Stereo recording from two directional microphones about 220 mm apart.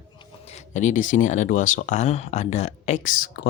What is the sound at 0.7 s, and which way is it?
Speech, 35° left (ahead or behind).